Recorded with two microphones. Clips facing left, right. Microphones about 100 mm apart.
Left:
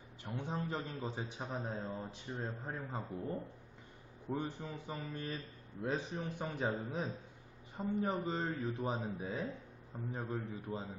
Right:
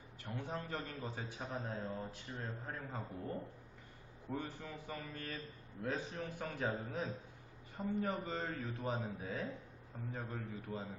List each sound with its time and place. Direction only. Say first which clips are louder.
0.3 s a man's voice: left 3 dB; 20° left (ahead or behind)
4.3 s a man's voice: left 4 dB; 20° left (ahead or behind)